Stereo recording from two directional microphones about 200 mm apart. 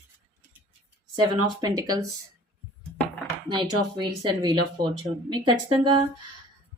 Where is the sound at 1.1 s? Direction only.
20° right (ahead or behind).